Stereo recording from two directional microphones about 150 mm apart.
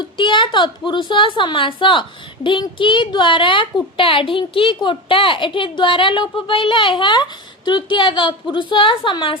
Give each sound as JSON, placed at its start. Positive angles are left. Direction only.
{"t": 0.0, "sound": "a woman's voice", "side_deg": 35}